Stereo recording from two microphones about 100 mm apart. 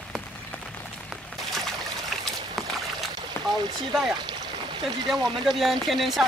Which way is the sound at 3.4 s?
25° left (ahead or behind).